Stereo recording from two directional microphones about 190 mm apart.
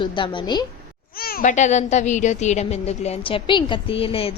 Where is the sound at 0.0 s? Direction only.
25° left (ahead or behind).